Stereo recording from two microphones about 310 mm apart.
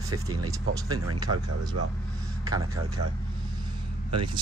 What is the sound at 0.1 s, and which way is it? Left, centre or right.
Speech, right.